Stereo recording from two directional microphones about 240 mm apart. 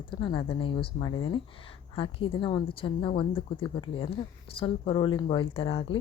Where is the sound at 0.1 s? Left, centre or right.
Centre.